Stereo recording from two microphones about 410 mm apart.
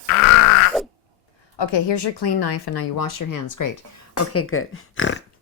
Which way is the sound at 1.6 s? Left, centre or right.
Left.